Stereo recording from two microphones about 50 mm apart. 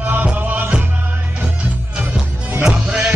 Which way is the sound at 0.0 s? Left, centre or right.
Right.